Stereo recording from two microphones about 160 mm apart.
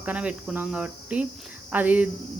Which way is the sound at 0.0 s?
10° right (ahead or behind).